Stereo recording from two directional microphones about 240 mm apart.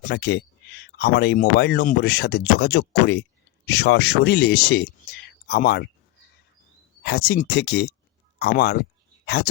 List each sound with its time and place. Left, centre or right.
0.1 s speech: left
7.0 s speech: left